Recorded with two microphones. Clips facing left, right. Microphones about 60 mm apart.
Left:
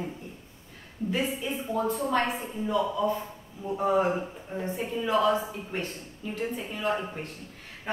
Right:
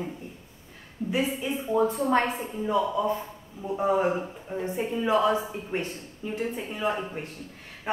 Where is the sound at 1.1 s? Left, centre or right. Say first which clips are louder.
Right 2 dB; centre.